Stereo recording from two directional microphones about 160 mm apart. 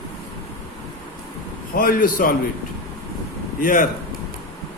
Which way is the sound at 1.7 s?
65° left (ahead or behind).